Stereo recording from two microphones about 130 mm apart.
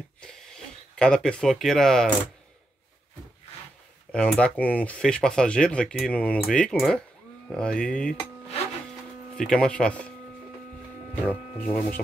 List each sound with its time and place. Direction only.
0.9 s speech: 5° left (ahead or behind)
4.1 s speech: 10° left (ahead or behind)
9.3 s speech: 5° left (ahead or behind)
11.2 s speech: 5° left (ahead or behind)